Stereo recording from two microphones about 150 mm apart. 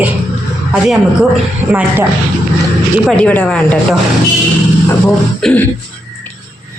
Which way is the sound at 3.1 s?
10° left (ahead or behind).